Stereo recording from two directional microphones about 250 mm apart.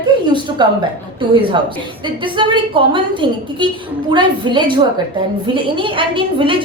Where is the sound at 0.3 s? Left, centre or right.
Centre.